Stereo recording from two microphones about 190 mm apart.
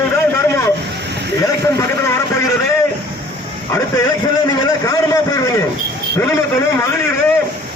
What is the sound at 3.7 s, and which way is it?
A man's voice, 15° left (ahead or behind).